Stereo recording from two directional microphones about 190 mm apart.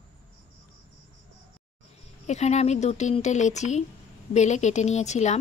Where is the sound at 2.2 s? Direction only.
35° left (ahead or behind).